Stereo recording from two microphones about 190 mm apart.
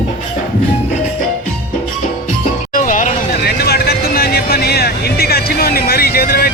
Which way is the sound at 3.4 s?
55° left (ahead or behind).